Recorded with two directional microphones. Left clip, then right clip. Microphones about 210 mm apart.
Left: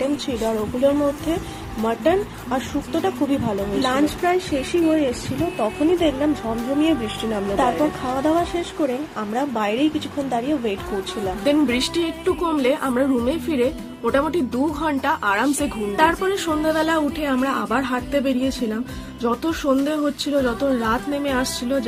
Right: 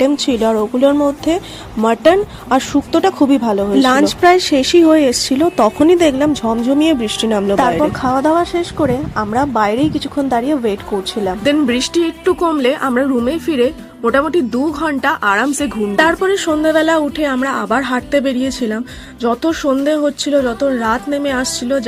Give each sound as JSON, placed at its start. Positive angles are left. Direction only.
{"t": 0.5, "sound": "a woman's voice", "side_deg": -45}